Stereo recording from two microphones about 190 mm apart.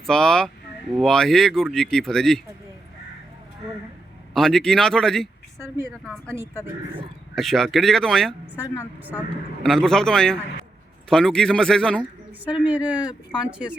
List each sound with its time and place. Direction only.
0.0 s speech: 5° left (ahead or behind)
4.4 s speech: centre (ahead or behind)
5.5 s speech: 15° right (ahead or behind)
7.3 s speech: centre (ahead or behind)
8.6 s a woman's voice: 15° left (ahead or behind)
9.6 s speech: centre (ahead or behind)
12.5 s speech: 5° right (ahead or behind)